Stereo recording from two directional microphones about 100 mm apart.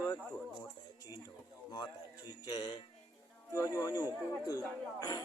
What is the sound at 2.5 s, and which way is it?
Speech, 40° left (ahead or behind).